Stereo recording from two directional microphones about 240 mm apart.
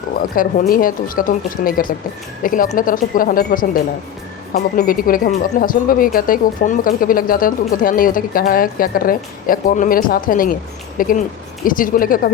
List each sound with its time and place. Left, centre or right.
0.2 s speech: left